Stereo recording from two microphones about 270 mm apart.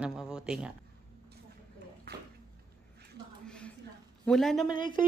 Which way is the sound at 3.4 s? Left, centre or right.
Centre.